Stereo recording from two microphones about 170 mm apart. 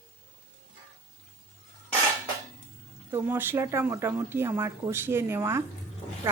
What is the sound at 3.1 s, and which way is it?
Speech, 15° right (ahead or behind).